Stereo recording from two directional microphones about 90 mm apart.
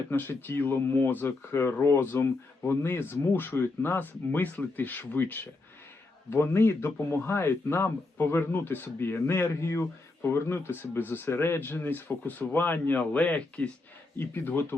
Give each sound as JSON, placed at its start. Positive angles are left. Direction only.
{"t": 0.1, "sound": "speech", "side_deg": 25}